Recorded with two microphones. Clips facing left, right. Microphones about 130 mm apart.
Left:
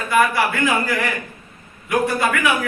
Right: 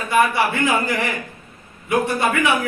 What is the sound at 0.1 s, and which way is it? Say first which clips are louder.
A woman's voice: even; 25° right (ahead or behind).